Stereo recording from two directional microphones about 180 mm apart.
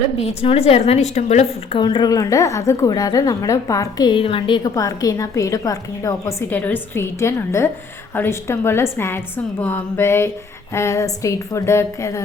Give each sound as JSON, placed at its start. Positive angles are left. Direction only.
{"t": 0.4, "sound": "a woman's voice", "side_deg": 35}
{"t": 1.8, "sound": "a woman's voice", "side_deg": 25}